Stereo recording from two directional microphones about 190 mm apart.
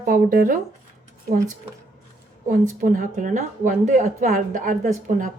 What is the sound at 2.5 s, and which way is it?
A woman's voice, 45° right (ahead or behind).